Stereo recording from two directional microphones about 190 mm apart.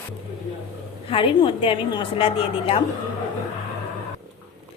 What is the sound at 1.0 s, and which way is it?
A woman's voice, 30° left (ahead or behind).